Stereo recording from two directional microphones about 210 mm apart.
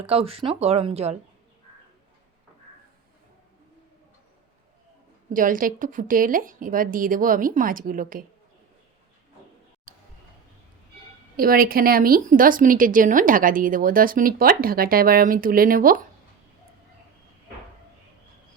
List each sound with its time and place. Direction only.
0.0 s speech: 25° right (ahead or behind)
5.3 s a woman's voice: 40° right (ahead or behind)
11.3 s speech: 45° right (ahead or behind)